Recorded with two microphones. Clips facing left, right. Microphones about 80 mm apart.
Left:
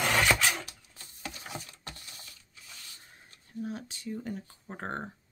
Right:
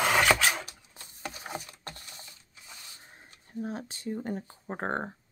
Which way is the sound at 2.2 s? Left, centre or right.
Right.